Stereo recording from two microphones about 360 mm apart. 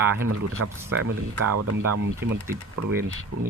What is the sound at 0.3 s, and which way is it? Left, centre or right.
Speech, right.